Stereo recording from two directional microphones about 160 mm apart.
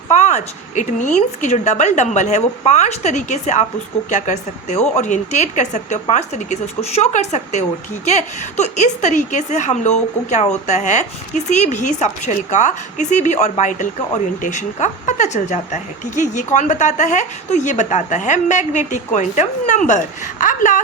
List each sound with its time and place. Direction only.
0.1 s a woman's voice: 45° left (ahead or behind)